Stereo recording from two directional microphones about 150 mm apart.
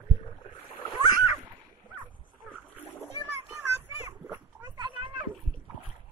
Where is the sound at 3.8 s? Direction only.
15° right (ahead or behind).